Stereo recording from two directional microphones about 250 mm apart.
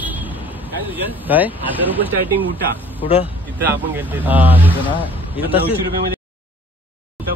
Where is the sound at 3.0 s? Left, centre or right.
Left.